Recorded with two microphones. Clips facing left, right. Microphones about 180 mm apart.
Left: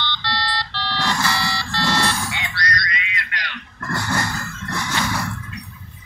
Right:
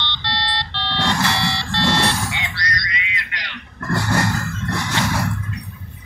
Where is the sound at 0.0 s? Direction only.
20° right (ahead or behind).